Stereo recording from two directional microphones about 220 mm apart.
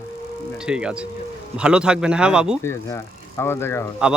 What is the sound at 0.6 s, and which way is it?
Speech, 5° right (ahead or behind).